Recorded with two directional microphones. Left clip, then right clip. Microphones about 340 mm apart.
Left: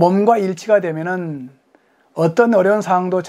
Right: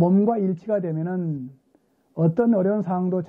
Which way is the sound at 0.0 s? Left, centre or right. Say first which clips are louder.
Left 8 dB; centre.